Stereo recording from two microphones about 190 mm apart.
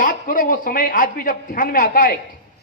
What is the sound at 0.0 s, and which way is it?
A man's voice, 45° left (ahead or behind).